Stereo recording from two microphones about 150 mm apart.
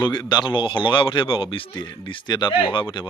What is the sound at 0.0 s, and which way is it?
Speech, 30° left (ahead or behind).